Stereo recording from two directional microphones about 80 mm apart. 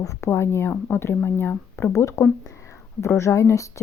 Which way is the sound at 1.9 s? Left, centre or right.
Left.